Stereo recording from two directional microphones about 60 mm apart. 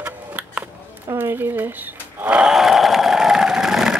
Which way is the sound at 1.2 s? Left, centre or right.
Right.